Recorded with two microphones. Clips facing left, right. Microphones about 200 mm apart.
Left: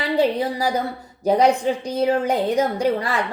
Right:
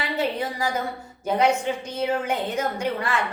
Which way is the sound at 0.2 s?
35° left (ahead or behind).